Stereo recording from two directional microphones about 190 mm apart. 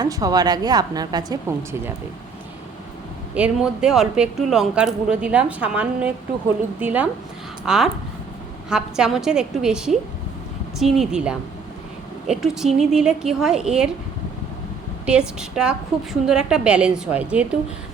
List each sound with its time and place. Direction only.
0.0 s a woman's voice: 20° right (ahead or behind)
3.3 s speech: 5° right (ahead or behind)
15.0 s speech: 5° right (ahead or behind)